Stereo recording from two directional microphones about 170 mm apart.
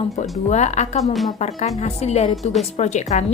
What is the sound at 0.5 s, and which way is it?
A woman's voice, 45° left (ahead or behind).